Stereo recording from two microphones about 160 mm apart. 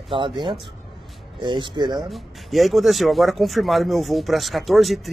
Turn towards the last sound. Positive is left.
turn(degrees=0)  # may be behind; listen again after turning